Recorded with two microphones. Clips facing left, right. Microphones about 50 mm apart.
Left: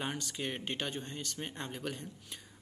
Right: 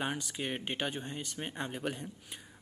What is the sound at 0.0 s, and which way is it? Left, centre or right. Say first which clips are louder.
Speech: right 2 dB; centre.